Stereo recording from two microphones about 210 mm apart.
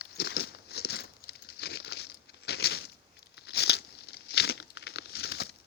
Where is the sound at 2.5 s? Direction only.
50° left (ahead or behind).